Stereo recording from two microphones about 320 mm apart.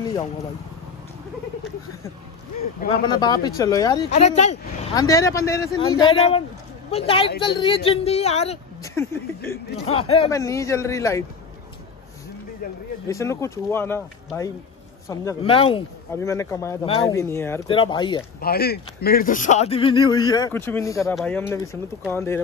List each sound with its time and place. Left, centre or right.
3.2 s speech: centre
8.9 s speech: centre
13.1 s speech: centre
18.4 s speech: left; by 22.4 s centre